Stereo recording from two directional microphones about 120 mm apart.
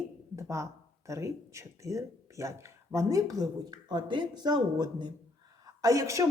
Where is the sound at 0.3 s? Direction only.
25° right (ahead or behind).